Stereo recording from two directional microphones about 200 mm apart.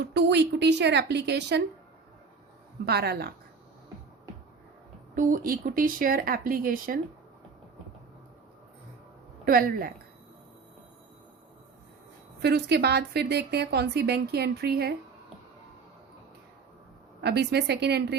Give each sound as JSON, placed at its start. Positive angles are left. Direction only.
{"t": 0.0, "sound": "a woman's voice", "side_deg": -60}
{"t": 2.8, "sound": "speech", "side_deg": -55}
{"t": 5.1, "sound": "speech", "side_deg": -45}
{"t": 9.4, "sound": "speech", "side_deg": -45}
{"t": 12.4, "sound": "a woman's voice", "side_deg": -55}
{"t": 17.2, "sound": "a woman's voice", "side_deg": -55}